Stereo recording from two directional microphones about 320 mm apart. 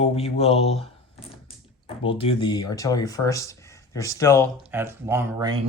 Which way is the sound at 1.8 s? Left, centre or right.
Centre.